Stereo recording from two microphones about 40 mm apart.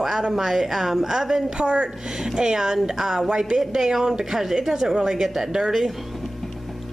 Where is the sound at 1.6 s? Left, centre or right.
Right.